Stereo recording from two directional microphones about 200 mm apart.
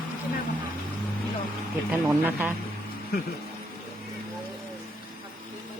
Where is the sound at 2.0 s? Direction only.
10° right (ahead or behind).